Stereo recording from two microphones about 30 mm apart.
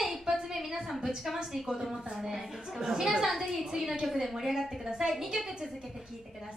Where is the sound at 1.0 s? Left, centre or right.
Centre.